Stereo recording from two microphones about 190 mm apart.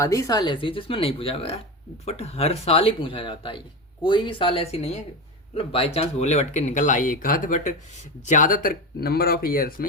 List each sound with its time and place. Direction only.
0.0 s speech: 15° left (ahead or behind); by 9.8 s 50° left (ahead or behind)